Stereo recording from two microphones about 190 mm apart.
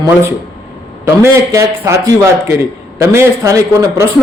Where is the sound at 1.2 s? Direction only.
15° right (ahead or behind).